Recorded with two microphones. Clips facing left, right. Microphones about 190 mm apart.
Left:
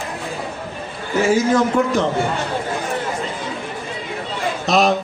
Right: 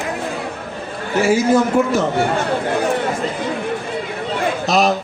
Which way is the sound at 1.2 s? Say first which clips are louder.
Right 1 dB; 10° right (ahead or behind).